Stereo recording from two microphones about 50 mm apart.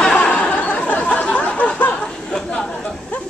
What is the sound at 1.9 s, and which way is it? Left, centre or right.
Chatter, centre.